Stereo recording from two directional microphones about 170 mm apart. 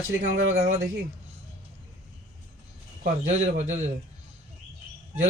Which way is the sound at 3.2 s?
45° right (ahead or behind).